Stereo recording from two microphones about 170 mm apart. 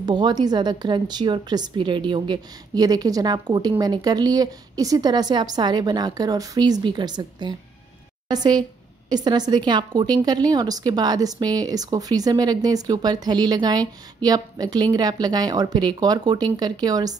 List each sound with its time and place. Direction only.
0.0 s a woman's voice: 25° right (ahead or behind)